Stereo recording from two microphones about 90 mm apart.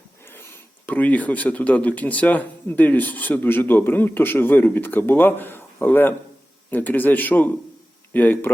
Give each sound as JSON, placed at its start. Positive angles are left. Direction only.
{"t": 0.9, "sound": "speech", "side_deg": 20}